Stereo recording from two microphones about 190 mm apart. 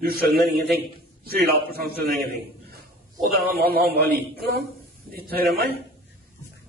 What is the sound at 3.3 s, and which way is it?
A man's voice, 55° right (ahead or behind).